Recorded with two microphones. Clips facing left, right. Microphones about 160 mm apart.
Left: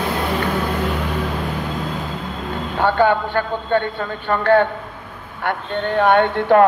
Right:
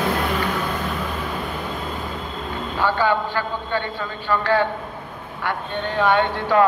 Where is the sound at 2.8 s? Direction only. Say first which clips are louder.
Left 4 dB; 55° left (ahead or behind).